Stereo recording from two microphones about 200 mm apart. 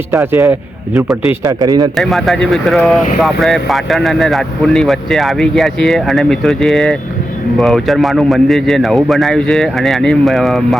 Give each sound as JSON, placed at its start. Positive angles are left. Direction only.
{"t": 0.1, "sound": "a man's voice", "side_deg": -15}
{"t": 2.0, "sound": "speech", "side_deg": 0}